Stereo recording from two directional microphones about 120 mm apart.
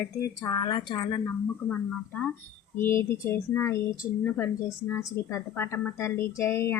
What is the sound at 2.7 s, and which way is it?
Speech, 20° left (ahead or behind).